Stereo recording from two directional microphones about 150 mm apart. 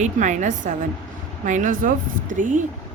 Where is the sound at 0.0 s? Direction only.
55° right (ahead or behind).